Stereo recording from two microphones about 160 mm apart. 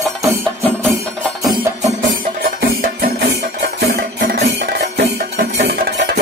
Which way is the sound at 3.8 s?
80° right.